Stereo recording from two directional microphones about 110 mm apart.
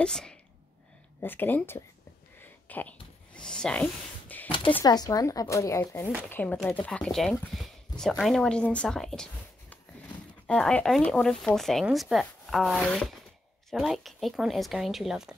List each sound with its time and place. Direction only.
0.0 s speech: 5° left (ahead or behind)
1.2 s speech: 15° left (ahead or behind)
2.4 s a sound: 15° left (ahead or behind)
4.8 s speech: 40° left (ahead or behind); by 7.3 s 5° left (ahead or behind)
7.5 s a sound: centre (ahead or behind)
8.2 s speech: 5° left (ahead or behind)